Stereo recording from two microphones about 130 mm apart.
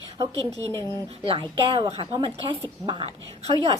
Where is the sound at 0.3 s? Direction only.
25° left (ahead or behind).